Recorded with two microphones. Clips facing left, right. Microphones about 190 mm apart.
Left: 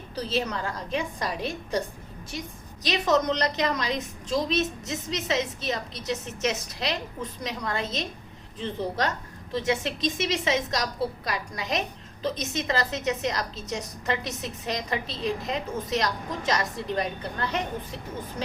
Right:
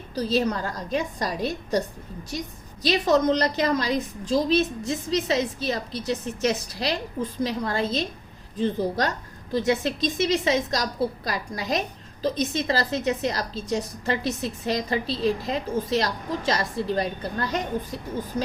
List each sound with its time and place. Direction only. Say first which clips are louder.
0.3 s a woman's voice: right 5 dB; 40° right (ahead or behind)
2.8 s a woman's voice: right 4 dB; 30° right (ahead or behind)